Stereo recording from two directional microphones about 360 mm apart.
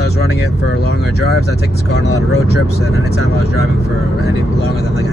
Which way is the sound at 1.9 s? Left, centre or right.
Left.